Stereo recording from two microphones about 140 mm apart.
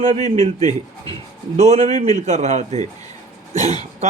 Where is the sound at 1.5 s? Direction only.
50° right (ahead or behind).